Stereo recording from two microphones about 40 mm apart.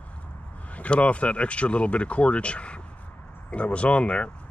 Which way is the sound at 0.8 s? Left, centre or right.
Left.